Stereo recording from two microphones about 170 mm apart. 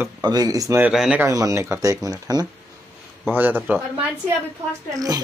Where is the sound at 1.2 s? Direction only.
20° right (ahead or behind).